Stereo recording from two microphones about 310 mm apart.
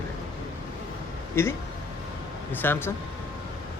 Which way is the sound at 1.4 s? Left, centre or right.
Centre.